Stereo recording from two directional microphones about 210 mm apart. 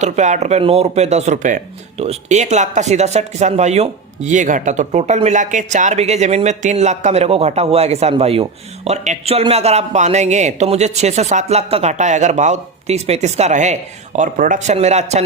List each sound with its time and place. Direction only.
0.0 s speech: 35° right (ahead or behind)